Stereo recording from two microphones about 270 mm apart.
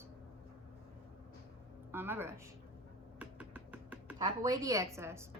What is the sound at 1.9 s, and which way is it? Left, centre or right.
Speech, centre.